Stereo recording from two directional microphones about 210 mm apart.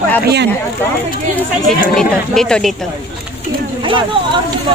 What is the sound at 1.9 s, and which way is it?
Speech, centre (ahead or behind).